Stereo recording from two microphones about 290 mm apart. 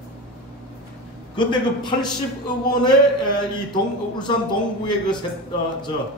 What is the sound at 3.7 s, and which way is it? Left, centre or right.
Speech, centre.